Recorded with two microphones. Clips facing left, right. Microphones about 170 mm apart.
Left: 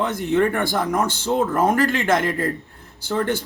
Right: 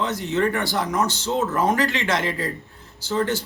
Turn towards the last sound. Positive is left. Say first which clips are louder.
# left 1 dB
turn(degrees=55)  # may be behind; listen again after turning